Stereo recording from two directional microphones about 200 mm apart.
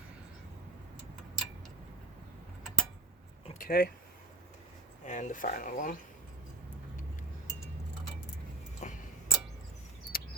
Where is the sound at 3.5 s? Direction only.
45° left (ahead or behind).